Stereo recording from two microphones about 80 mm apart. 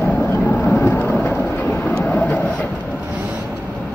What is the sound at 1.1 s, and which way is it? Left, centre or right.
Thunder, left.